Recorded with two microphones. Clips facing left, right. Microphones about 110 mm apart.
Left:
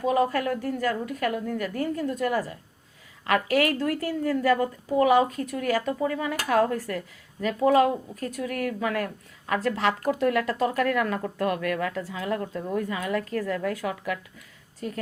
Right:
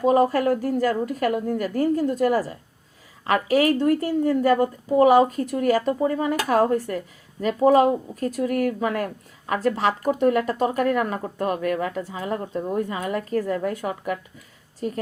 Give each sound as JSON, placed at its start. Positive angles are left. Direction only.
{"t": 0.0, "sound": "a woman's voice", "side_deg": -35}